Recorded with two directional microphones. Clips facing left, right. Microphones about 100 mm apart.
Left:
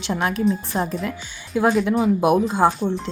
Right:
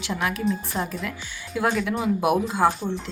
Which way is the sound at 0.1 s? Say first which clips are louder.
Left 4 dB; 35° left (ahead or behind).